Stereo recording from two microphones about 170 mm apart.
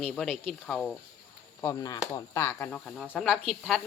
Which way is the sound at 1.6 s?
20° left (ahead or behind).